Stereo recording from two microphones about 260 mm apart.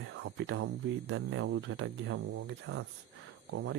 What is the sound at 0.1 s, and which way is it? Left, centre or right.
Speech, right.